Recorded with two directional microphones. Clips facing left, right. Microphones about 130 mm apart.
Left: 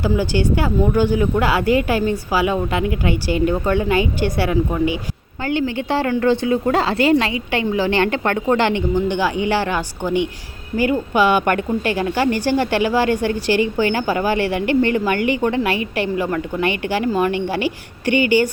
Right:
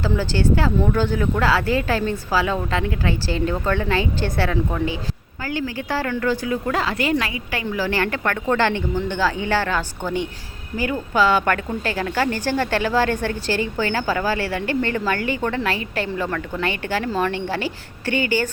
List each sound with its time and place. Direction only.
0.0 s speech: 15° left (ahead or behind)
5.4 s a woman's voice: 25° left (ahead or behind)